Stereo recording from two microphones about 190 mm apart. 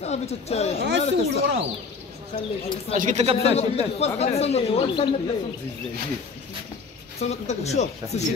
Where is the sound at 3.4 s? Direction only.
35° left (ahead or behind).